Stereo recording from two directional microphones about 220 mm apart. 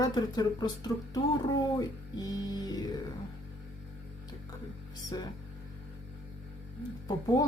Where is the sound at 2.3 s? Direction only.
15° left (ahead or behind).